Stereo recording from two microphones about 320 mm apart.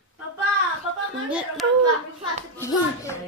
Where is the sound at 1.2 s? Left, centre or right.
Centre.